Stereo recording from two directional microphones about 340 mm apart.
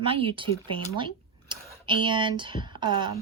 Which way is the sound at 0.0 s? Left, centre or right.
Centre.